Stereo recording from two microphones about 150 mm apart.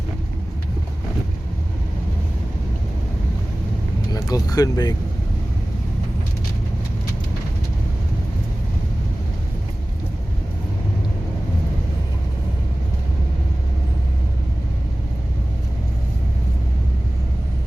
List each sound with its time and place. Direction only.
4.1 s vehicle: 25° left (ahead or behind)